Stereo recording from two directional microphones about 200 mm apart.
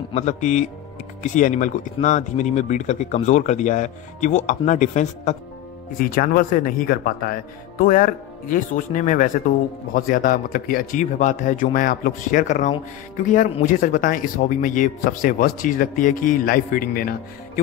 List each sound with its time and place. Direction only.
0.1 s speech: 35° left (ahead or behind)